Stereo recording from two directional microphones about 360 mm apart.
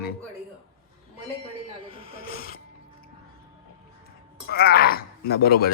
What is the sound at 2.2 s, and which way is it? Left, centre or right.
Mechanisms, left.